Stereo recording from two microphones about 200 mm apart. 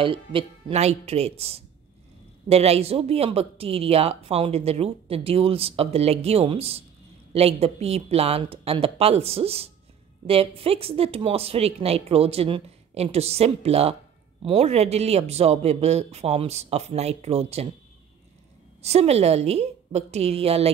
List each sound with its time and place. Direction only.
0.0 s speech: 25° right (ahead or behind)
18.8 s speech: 30° right (ahead or behind)